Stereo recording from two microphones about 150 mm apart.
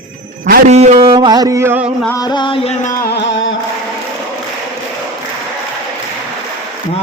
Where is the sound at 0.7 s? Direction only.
50° right (ahead or behind).